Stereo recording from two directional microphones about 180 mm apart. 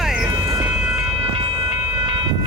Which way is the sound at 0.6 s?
5° right (ahead or behind).